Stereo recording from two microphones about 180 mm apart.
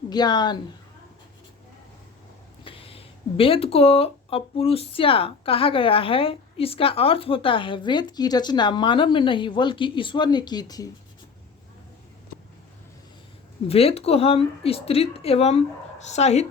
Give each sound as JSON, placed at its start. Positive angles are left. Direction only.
{"t": 0.1, "sound": "speech", "side_deg": 25}
{"t": 2.6, "sound": "speech", "side_deg": 30}
{"t": 13.7, "sound": "speech", "side_deg": 35}